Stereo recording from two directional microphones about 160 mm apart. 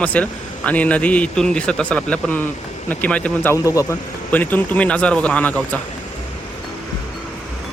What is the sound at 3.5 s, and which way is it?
A man's voice, 20° left (ahead or behind).